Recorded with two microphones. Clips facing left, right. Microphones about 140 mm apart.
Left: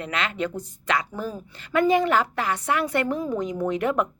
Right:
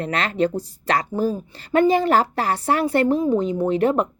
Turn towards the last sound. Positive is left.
turn(degrees=-30)  # may be behind; listen again after turning